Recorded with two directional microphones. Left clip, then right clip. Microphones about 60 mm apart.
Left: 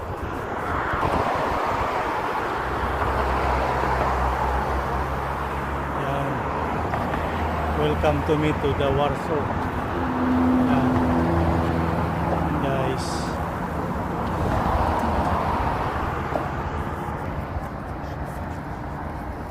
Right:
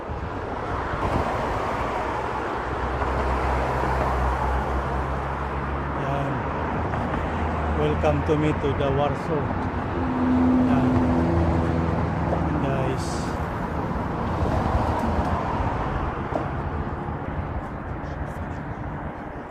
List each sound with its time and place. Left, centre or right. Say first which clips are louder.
1.0 s vehicle: left 1 dB; left
3.0 s vehicle: left 2 dB; left
7.8 s speech: left 1 dB; left
10.2 s vehicle: even; left
11.0 s vehicle: left 1 dB; left
11.5 s vehicle: left 1 dB; left
12.6 s vehicle: left 2 dB; left
14.5 s vehicle: left 4 dB; left
15.1 s vehicle: left 3 dB; left